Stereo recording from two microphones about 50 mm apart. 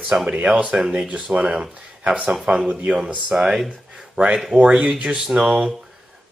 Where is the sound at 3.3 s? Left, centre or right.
Centre.